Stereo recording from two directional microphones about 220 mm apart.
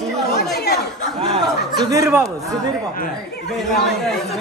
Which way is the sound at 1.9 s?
10° right (ahead or behind).